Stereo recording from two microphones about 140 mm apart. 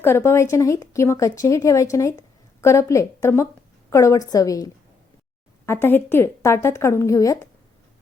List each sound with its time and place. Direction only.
0.0 s speech: 20° left (ahead or behind)